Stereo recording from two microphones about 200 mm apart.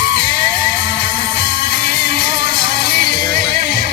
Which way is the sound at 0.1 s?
40° right (ahead or behind).